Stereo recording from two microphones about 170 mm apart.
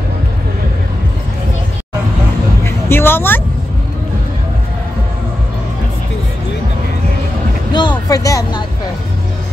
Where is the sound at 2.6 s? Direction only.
15° left (ahead or behind).